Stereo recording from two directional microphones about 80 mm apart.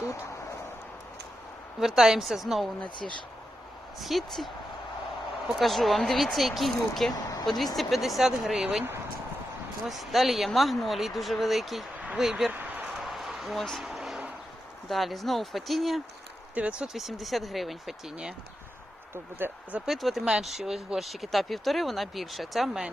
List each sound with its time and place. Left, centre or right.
2.0 s speech: centre
4.0 s speech: centre
7.1 s a sound: left
7.4 s speech: centre
9.8 s speech: centre
12.5 s a sound: centre
13.0 s a sound: centre
14.8 s speech: centre
16.6 s speech: centre
19.4 s speech: right
19.9 s speech: centre